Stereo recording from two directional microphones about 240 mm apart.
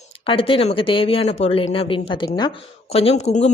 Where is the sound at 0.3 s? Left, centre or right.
Left.